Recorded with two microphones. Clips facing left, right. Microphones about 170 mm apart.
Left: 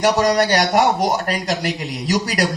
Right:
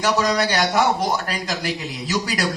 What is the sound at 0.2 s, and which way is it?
Speech, 40° left (ahead or behind).